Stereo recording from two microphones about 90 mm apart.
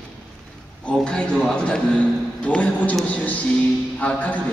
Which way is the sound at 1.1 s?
10° left (ahead or behind).